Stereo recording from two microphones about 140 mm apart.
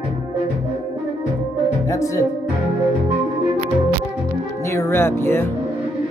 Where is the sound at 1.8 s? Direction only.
20° left (ahead or behind).